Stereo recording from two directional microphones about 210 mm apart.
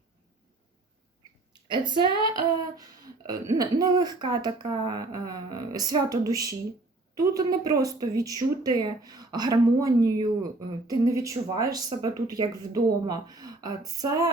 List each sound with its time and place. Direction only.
1.6 s a woman's voice: 20° right (ahead or behind)
3.2 s a woman's voice: 20° right (ahead or behind)